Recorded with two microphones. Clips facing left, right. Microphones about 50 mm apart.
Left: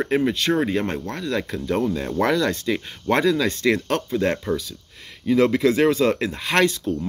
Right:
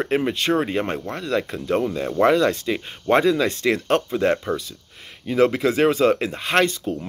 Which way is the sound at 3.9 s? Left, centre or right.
Right.